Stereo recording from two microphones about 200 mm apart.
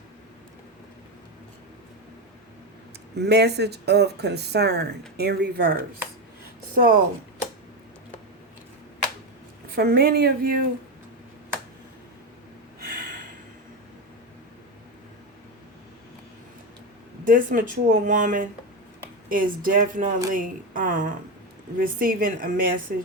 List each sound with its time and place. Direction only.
3.2 s speech: 55° right (ahead or behind)
6.7 s a woman's voice: 45° right (ahead or behind)
9.7 s a woman's voice: 50° right (ahead or behind)
12.8 s snort: 45° right (ahead or behind)
17.2 s a woman's voice: 45° right (ahead or behind)